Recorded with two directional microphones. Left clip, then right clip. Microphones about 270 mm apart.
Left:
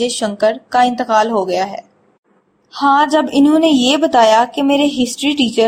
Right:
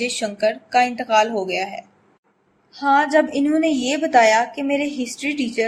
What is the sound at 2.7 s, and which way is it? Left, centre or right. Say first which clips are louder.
A woman's voice: left 5 dB; centre.